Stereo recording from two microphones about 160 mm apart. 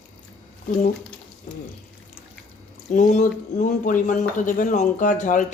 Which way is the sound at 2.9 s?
50° left (ahead or behind).